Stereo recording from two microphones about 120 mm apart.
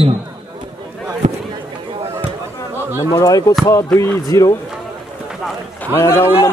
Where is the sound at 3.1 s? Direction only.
30° left (ahead or behind).